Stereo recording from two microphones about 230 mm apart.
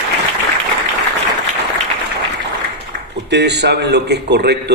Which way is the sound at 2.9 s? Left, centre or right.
Right.